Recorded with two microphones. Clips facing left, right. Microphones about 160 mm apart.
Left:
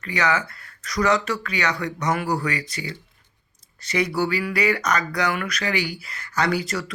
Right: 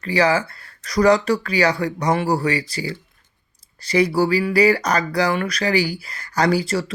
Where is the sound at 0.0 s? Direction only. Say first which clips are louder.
Right 5 dB; 30° right (ahead or behind).